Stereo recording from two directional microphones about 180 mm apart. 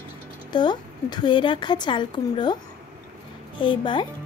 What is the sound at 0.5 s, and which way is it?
Speech, 25° left (ahead or behind).